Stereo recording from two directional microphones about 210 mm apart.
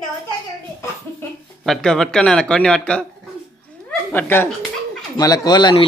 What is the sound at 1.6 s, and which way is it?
Speech, centre (ahead or behind).